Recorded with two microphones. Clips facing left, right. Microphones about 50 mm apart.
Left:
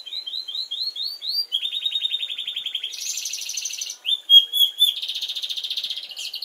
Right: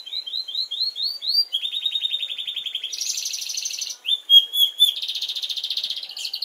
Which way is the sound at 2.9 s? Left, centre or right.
Centre.